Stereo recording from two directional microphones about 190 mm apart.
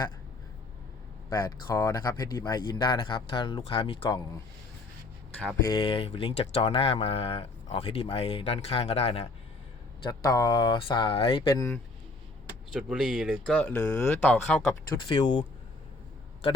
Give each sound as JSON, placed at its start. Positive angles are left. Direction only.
{"t": 1.3, "sound": "speech", "side_deg": 20}
{"t": 5.3, "sound": "speech", "side_deg": 5}
{"t": 5.7, "sound": "speech", "side_deg": 30}
{"t": 10.0, "sound": "speech", "side_deg": 20}
{"t": 12.7, "sound": "speech", "side_deg": 0}
{"t": 14.9, "sound": "speech", "side_deg": 25}